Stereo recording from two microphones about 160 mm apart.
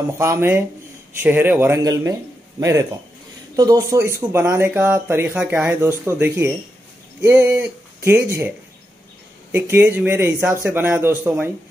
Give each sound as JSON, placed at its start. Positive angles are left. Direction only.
{"t": 0.2, "sound": "speech", "side_deg": -15}